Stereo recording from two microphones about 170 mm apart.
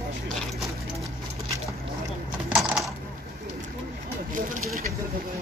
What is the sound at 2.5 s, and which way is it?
Coin, centre (ahead or behind).